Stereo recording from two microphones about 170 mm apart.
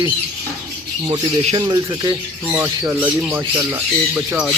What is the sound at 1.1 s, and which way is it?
Speech, 35° right (ahead or behind).